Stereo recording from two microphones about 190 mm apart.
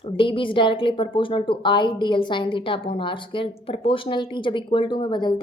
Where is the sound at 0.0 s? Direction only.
25° left (ahead or behind).